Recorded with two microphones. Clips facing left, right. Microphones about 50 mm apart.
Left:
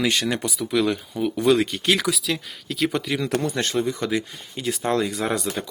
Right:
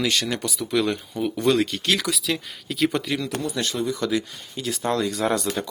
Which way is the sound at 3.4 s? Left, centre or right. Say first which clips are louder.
Left 2 dB; left.